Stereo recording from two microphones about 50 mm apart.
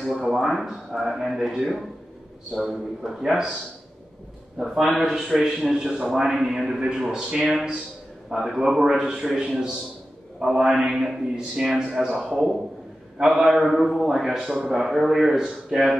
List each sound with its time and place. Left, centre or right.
0.3 s speech: centre
4.6 s a man's voice: centre
8.3 s a man's voice: centre